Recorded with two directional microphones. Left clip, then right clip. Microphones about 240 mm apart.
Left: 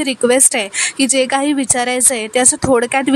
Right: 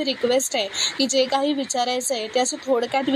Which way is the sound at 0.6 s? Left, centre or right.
Left.